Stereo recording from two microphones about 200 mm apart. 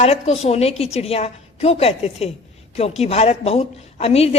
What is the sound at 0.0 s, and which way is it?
A woman's voice, 30° left (ahead or behind).